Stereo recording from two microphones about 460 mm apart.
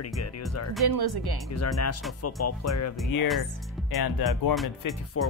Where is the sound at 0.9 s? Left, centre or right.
Right.